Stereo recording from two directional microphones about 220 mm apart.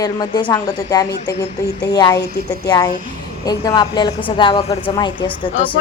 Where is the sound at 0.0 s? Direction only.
20° left (ahead or behind).